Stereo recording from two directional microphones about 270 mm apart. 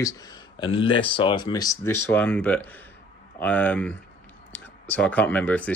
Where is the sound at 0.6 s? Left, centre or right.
Centre.